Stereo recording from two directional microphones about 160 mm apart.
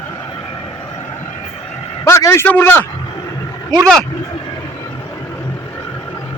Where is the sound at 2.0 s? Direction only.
15° left (ahead or behind).